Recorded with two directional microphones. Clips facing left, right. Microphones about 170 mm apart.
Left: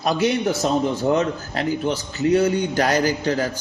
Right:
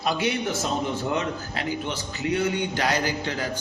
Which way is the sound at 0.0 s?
40° left (ahead or behind).